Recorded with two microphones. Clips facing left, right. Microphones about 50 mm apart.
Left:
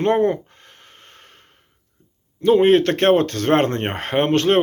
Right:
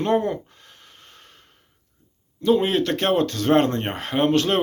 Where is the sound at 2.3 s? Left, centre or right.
Left.